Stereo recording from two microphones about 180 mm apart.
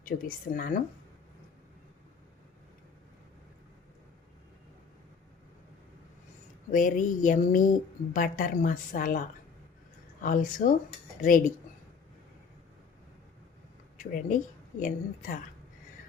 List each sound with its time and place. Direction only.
0.1 s speech: 55° left (ahead or behind)
6.7 s speech: 45° left (ahead or behind)
14.0 s speech: 45° left (ahead or behind)